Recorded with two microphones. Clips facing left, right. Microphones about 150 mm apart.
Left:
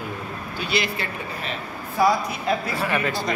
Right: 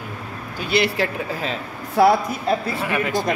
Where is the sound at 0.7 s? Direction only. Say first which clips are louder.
Right 7 dB; 65° right (ahead or behind).